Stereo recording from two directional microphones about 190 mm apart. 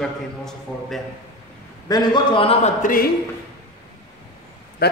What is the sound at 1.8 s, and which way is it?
Speech, 20° left (ahead or behind).